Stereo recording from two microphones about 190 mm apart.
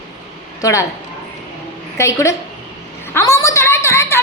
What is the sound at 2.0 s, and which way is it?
A woman's voice, 15° left (ahead or behind).